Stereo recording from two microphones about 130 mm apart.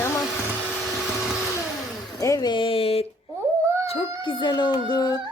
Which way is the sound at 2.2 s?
30° left (ahead or behind).